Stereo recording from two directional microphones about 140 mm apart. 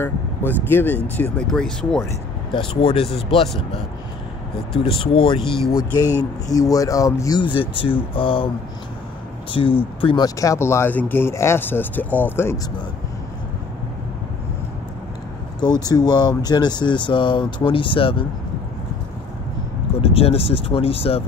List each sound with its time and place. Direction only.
0.0 s speech: 15° left (ahead or behind)
2.5 s speech: 40° left (ahead or behind)
5.0 s speech: 40° left (ahead or behind)
5.9 s speech: 25° left (ahead or behind)
9.5 s speech: 40° left (ahead or behind)
10.2 s speech: 25° left (ahead or behind)
15.9 s speech: 30° left (ahead or behind)
20.0 s speech: 45° left (ahead or behind)